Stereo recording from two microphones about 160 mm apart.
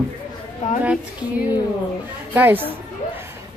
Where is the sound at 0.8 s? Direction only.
10° right (ahead or behind).